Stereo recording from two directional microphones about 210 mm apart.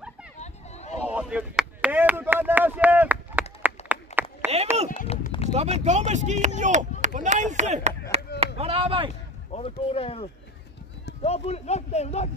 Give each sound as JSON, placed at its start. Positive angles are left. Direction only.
{"t": 0.4, "sound": "a sound", "side_deg": 35}
{"t": 1.0, "sound": "chop", "side_deg": -5}
{"t": 4.9, "sound": "run", "side_deg": 30}
{"t": 5.5, "sound": "speech", "side_deg": -30}
{"t": 8.1, "sound": "chop", "side_deg": -30}
{"t": 8.5, "sound": "speech", "side_deg": -30}
{"t": 9.5, "sound": "speech", "side_deg": 30}
{"t": 11.2, "sound": "speech", "side_deg": 30}